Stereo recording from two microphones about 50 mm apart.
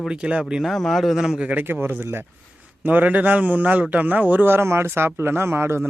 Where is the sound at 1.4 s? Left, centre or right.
Right.